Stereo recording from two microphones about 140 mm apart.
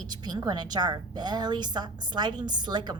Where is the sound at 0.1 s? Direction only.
30° right (ahead or behind).